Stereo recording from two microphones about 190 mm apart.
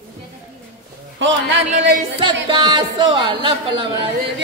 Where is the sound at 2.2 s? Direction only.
25° right (ahead or behind).